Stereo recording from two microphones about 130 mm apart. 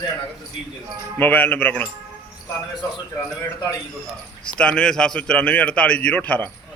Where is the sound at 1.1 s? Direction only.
15° left (ahead or behind).